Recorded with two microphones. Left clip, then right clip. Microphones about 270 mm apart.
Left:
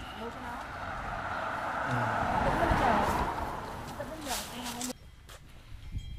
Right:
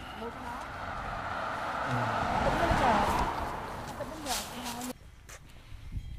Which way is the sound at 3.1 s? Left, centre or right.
Right.